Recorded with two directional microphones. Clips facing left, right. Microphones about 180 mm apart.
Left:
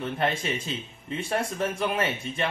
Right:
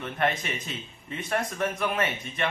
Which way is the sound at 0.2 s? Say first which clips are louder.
Right 1 dB; 30° left (ahead or behind).